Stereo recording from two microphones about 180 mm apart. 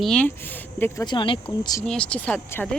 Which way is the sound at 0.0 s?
5° left (ahead or behind).